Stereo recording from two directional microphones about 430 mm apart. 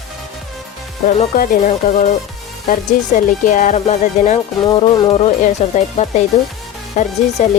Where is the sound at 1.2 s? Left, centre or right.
Centre.